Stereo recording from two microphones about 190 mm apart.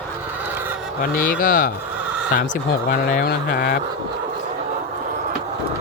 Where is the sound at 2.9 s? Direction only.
50° left (ahead or behind).